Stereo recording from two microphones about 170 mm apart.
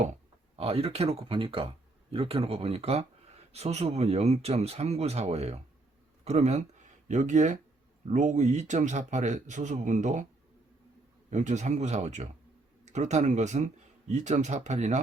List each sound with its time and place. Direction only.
0.0 s speech: 40° right (ahead or behind)
11.3 s speech: 45° right (ahead or behind)